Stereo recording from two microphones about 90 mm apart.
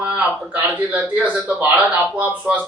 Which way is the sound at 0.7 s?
15° right (ahead or behind).